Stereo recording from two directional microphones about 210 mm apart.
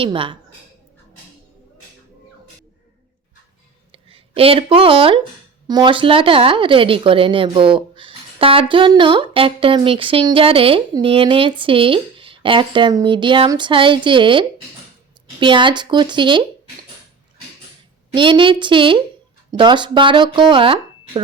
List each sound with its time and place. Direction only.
0.0 s a woman's voice: 25° right (ahead or behind)
3.9 s a woman's voice: 25° right (ahead or behind)
18.1 s a woman's voice: 25° right (ahead or behind)